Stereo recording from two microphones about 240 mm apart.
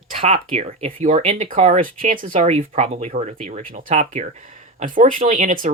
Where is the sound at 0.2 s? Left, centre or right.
Right.